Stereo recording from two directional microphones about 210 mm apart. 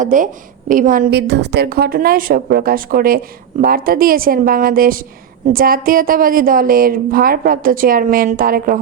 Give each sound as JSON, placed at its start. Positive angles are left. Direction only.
{"t": 0.0, "sound": "a woman's voice", "side_deg": -40}